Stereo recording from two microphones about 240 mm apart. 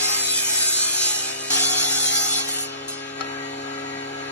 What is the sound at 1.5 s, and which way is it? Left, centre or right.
Music, left.